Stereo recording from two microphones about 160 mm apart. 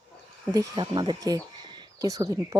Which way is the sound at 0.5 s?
25° right (ahead or behind).